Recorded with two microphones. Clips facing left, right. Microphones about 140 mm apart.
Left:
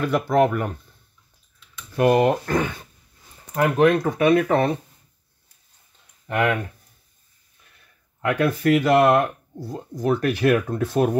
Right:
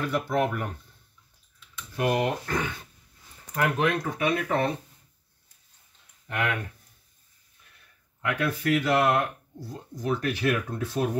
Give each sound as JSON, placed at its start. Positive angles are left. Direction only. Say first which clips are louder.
{"t": 0.1, "sound": "speech", "louder": "left 9 dB", "side_deg": 85}
{"t": 2.0, "sound": "speech", "louder": "left 8 dB", "side_deg": 55}
{"t": 6.2, "sound": "speech", "louder": "left 8 dB", "side_deg": 45}
{"t": 8.3, "sound": "speech", "louder": "left 7 dB", "side_deg": 60}